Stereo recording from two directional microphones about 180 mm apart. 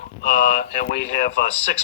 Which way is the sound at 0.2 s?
50° left (ahead or behind).